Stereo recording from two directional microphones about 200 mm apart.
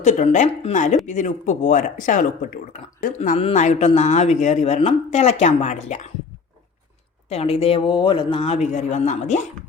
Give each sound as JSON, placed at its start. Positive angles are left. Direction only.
{"t": 0.0, "sound": "speech", "side_deg": 35}
{"t": 7.3, "sound": "speech", "side_deg": 30}